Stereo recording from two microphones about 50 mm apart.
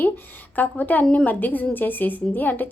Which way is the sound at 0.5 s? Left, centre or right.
Left.